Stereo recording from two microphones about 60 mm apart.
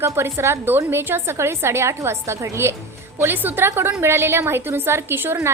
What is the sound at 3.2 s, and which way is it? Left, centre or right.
A woman's voice, right.